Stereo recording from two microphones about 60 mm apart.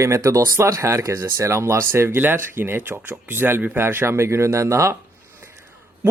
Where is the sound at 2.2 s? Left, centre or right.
Right.